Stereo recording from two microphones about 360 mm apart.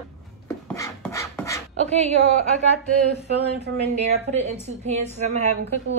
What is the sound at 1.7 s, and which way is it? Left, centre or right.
Speech, centre.